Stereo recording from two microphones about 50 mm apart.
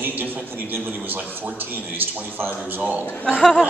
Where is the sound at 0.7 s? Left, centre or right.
Right.